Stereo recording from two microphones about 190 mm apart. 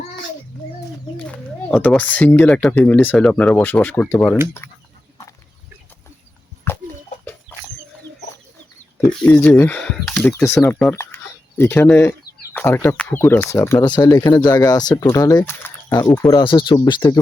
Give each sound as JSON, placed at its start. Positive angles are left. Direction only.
{"t": 1.1, "sound": "speech", "side_deg": 5}
{"t": 4.6, "sound": "chicken", "side_deg": 10}
{"t": 6.7, "sound": "chicken", "side_deg": 10}
{"t": 9.2, "sound": "speech", "side_deg": 10}
{"t": 16.3, "sound": "speech", "side_deg": 25}